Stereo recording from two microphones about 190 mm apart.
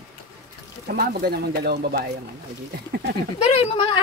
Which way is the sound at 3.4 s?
35° left (ahead or behind).